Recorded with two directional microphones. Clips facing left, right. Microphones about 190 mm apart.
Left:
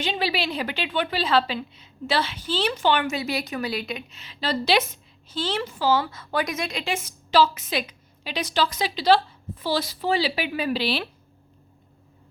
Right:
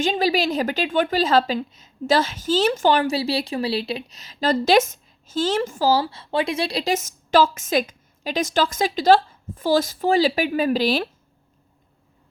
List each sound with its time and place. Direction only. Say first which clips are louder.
0.0 s a woman's voice: right 6 dB; 45° right (ahead or behind)